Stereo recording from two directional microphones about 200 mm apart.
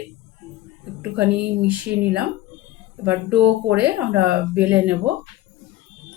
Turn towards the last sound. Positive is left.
turn(degrees=-5)  # may be behind; listen again after turning